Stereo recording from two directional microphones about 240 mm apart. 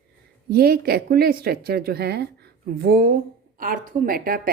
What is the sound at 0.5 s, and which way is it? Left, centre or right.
Speech, right.